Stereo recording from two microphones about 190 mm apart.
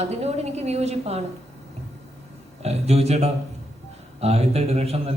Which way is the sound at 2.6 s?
35° right (ahead or behind).